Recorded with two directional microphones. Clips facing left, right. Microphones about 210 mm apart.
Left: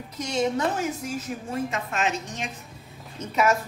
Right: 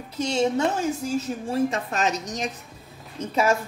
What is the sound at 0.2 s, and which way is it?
A woman's voice, 30° right (ahead or behind).